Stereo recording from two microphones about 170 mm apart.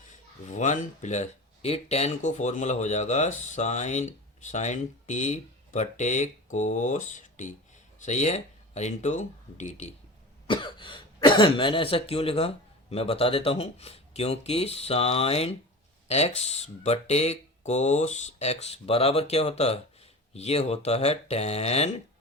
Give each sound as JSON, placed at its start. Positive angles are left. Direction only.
{"t": 0.4, "sound": "speech", "side_deg": 45}
{"t": 10.4, "sound": "speech", "side_deg": 30}